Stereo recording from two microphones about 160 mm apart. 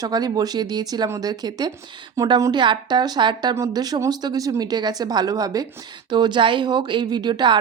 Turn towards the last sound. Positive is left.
turn(degrees=-30)  # may be behind; listen again after turning